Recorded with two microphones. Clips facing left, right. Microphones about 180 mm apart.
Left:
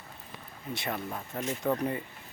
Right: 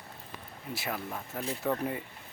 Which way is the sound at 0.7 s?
5° right (ahead or behind).